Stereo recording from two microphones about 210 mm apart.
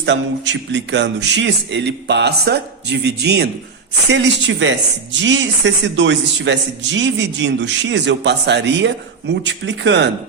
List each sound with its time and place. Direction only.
0.0 s a man's voice: 60° right (ahead or behind)